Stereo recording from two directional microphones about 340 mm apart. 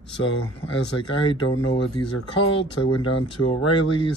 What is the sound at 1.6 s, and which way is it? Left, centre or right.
Speech, centre.